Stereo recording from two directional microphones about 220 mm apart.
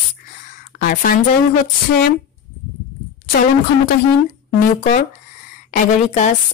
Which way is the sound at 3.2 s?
45° left (ahead or behind).